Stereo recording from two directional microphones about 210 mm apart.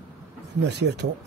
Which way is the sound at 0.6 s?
55° right (ahead or behind).